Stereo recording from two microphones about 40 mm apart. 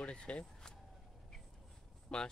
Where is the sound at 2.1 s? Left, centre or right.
Centre.